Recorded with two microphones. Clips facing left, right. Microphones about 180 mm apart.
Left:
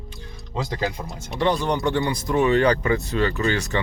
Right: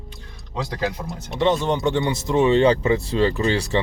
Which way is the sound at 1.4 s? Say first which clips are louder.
Right 2 dB; 20° right (ahead or behind).